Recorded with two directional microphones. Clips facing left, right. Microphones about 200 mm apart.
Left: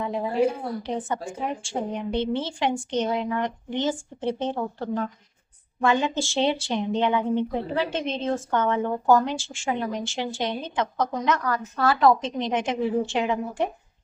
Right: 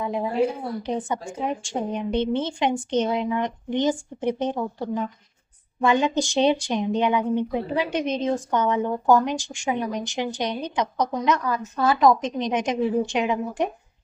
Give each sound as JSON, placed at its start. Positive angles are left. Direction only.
{"t": 0.0, "sound": "a woman's voice", "side_deg": -10}